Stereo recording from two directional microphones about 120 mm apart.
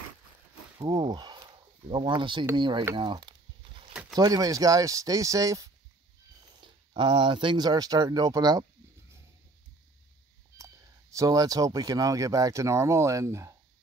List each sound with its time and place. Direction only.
0.7 s speech: 30° right (ahead or behind)
3.0 s a sound: 40° right (ahead or behind)
4.1 s speech: 30° right (ahead or behind)
7.0 s speech: 45° right (ahead or behind)
10.6 s speech: 25° right (ahead or behind)